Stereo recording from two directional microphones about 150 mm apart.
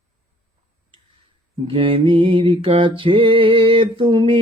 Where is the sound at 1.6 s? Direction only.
35° right (ahead or behind).